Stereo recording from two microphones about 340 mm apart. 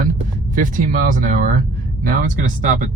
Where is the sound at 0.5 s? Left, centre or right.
Right.